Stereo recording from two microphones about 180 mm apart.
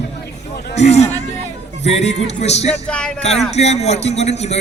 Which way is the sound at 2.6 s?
5° left (ahead or behind).